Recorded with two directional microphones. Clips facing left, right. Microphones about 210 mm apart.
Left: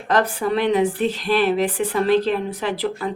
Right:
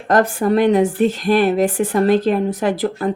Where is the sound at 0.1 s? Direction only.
45° right (ahead or behind).